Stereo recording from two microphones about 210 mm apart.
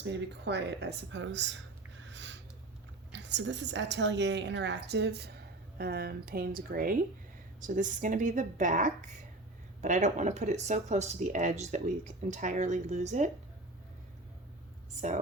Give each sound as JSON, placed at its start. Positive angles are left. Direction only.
{"t": 0.0, "sound": "a woman's voice", "side_deg": -55}
{"t": 2.0, "sound": "a sound", "side_deg": -60}
{"t": 3.1, "sound": "a woman's voice", "side_deg": -55}